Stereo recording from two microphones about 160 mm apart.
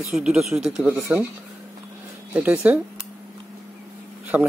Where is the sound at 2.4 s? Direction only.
10° right (ahead or behind).